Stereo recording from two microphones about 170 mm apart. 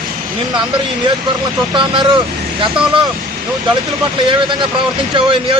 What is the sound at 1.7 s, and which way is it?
Speech, 30° right (ahead or behind).